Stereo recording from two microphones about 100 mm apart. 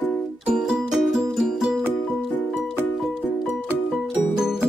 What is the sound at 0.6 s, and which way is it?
Music, 5° right (ahead or behind).